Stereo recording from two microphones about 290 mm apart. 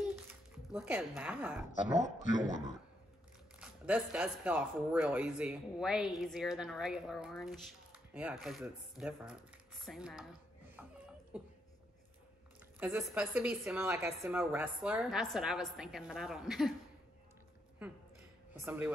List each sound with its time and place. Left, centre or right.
0.0 s a sound: centre
1.7 s speech: left
3.5 s speech: centre
10.8 s a sound: centre
11.3 s speech: centre
12.7 s speech: centre
18.5 s speech: centre